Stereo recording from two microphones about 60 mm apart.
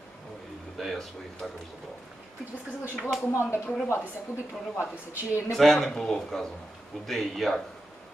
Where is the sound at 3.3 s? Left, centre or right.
Left.